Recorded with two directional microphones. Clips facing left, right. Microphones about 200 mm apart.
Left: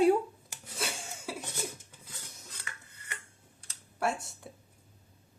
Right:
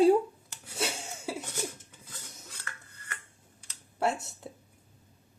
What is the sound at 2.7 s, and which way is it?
Dishes, 15° left (ahead or behind).